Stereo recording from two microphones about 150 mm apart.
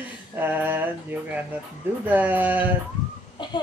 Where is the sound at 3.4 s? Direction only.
30° left (ahead or behind).